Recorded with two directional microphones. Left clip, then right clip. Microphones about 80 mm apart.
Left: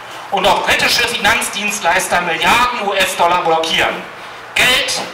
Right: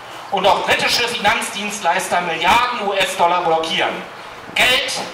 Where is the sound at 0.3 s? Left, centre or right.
Left.